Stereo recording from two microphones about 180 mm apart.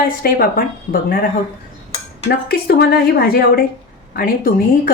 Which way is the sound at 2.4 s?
60° left (ahead or behind).